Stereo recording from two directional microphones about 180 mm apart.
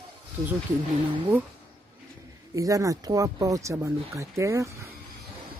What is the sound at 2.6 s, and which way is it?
Speech, 20° right (ahead or behind).